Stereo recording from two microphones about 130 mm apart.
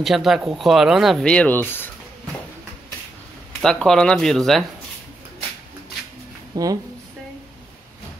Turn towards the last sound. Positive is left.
turn(degrees=-30)  # may be behind; listen again after turning